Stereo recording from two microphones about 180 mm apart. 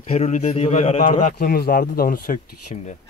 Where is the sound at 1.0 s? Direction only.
50° left (ahead or behind).